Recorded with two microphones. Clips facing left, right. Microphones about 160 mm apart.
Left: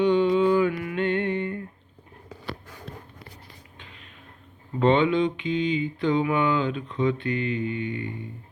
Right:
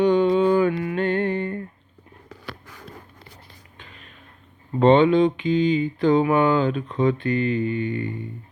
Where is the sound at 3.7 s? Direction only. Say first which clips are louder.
Right 4 dB; 45° right (ahead or behind).